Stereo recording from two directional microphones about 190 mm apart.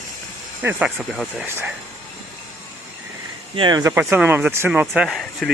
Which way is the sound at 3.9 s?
10° right (ahead or behind).